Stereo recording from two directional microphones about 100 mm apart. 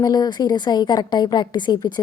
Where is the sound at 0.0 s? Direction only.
40° left (ahead or behind).